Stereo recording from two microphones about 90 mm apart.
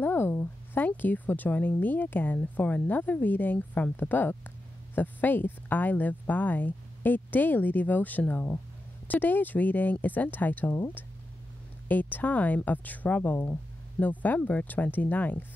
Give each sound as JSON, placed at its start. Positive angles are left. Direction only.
{"t": 0.0, "sound": "speech", "side_deg": 25}